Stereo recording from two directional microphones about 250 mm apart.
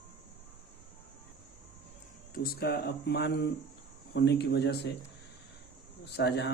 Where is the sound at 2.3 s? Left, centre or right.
Left.